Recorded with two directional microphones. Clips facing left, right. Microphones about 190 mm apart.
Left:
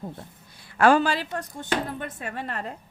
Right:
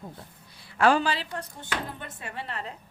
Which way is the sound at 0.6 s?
50° left (ahead or behind).